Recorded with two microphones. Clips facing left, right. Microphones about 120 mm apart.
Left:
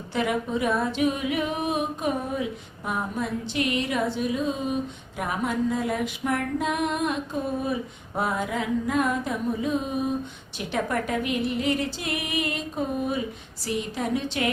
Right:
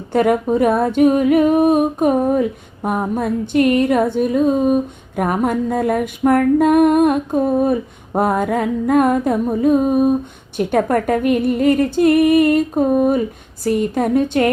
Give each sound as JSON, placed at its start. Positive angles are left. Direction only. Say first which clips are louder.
{"t": 0.1, "sound": "humming", "louder": "right 11 dB", "side_deg": -50}